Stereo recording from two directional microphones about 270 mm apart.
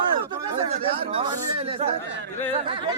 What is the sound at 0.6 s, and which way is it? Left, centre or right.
Speech, right.